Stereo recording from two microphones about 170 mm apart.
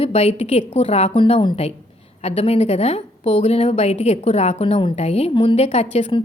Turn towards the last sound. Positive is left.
turn(degrees=40)  # may be behind; listen again after turning